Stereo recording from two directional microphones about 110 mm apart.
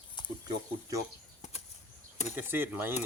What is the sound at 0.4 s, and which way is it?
Speech, 30° right (ahead or behind).